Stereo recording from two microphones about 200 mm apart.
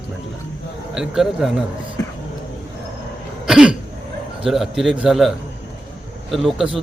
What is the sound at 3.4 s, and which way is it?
Throat clearing, 5° right (ahead or behind).